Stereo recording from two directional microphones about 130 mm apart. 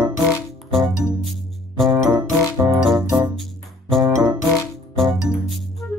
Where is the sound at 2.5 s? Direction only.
20° right (ahead or behind).